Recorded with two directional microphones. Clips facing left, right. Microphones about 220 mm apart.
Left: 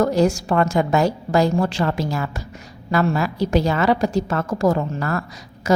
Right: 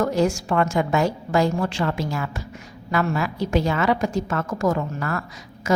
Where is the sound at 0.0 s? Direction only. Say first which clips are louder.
Left 3 dB; 35° left (ahead or behind).